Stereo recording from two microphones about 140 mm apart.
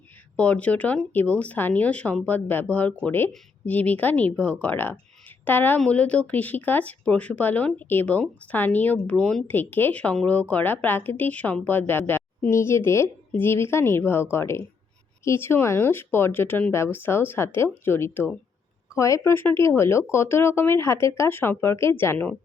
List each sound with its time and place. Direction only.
0.3 s a woman's voice: 10° left (ahead or behind)